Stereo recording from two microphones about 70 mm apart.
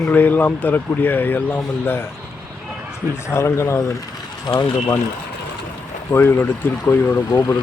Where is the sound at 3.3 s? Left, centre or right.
Left.